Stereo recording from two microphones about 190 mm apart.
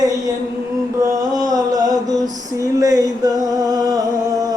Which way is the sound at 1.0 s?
20° right (ahead or behind).